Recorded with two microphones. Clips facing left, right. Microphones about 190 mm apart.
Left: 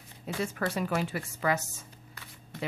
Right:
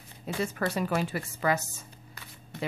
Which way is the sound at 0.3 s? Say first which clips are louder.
Right 2 dB; 35° right (ahead or behind).